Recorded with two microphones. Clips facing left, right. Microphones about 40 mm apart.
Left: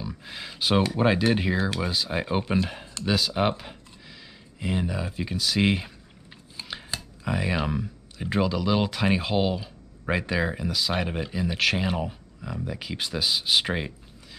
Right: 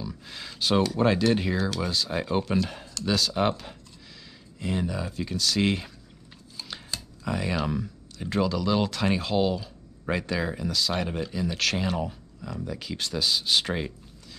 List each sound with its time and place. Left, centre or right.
0.0 s speech: centre